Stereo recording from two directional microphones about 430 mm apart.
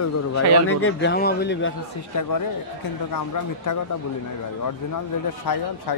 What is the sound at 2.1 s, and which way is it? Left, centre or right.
Speech, left.